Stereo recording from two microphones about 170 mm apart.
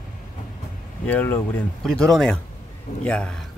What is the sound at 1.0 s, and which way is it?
Speech, 10° left (ahead or behind).